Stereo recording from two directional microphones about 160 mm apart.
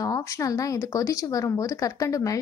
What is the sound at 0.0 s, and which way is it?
A woman's voice, 20° left (ahead or behind).